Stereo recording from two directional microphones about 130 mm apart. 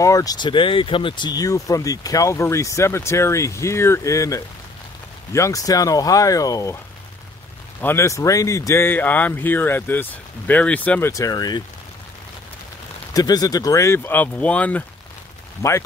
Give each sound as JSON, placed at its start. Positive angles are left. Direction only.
{"t": 0.0, "sound": "speech", "side_deg": 25}
{"t": 7.8, "sound": "speech", "side_deg": 20}
{"t": 13.1, "sound": "speech", "side_deg": 30}
{"t": 15.6, "sound": "speech", "side_deg": 25}